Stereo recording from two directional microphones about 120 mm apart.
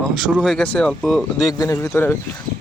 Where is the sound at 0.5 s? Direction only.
10° left (ahead or behind).